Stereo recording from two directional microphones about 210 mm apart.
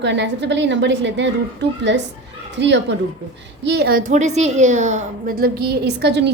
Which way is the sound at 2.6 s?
55° right (ahead or behind).